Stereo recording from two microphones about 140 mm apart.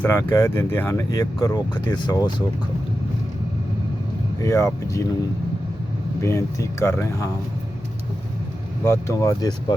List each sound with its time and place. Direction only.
0.0 s speech: 15° left (ahead or behind); by 2.3 s 30° left (ahead or behind)
4.4 s speech: 20° left (ahead or behind)
6.2 s speech: 20° left (ahead or behind)
8.8 s speech: 20° left (ahead or behind)